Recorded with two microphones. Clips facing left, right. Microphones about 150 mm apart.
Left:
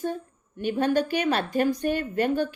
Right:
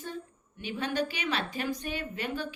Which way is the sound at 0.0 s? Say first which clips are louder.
Left 9 dB; 50° left (ahead or behind).